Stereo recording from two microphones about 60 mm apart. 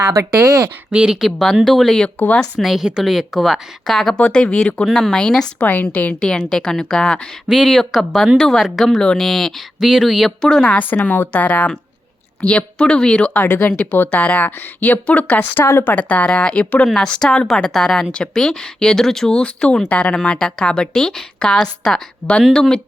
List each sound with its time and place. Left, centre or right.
0.4 s speech: right
0.9 s speech: centre
3.8 s speech: centre
5.5 s speech: left
6.2 s speech: centre
7.4 s speech: centre
8.9 s speech: centre
10.4 s speech: centre
10.8 s speech: left
15.6 s a woman's voice: left
15.9 s speech: left; by 19.4 s centre
19.4 s speech: centre